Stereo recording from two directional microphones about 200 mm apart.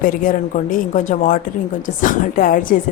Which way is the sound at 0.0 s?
45° left (ahead or behind).